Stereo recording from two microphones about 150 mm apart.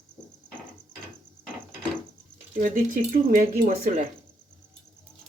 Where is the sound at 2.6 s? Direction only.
65° right (ahead or behind).